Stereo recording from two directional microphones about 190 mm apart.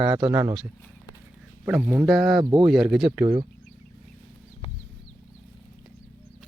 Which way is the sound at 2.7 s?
Centre (ahead or behind).